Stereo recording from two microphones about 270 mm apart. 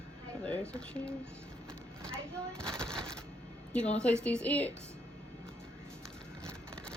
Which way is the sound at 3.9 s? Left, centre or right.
Centre.